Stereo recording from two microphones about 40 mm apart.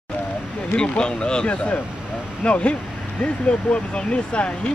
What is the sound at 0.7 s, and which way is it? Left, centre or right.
Speech, left.